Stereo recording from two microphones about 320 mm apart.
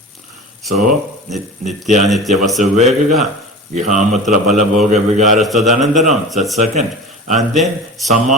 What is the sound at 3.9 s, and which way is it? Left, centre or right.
Speech, right.